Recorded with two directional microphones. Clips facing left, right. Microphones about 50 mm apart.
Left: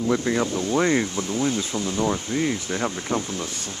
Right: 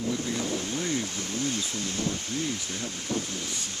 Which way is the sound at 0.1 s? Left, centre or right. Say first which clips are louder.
Left 10 dB; left.